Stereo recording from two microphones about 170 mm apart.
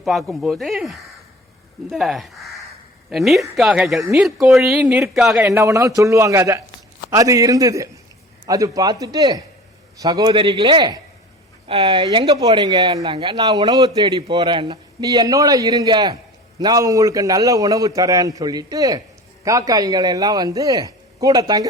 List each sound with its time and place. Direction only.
0.0 s speech: centre (ahead or behind)
5.5 s a man's voice: 15° right (ahead or behind)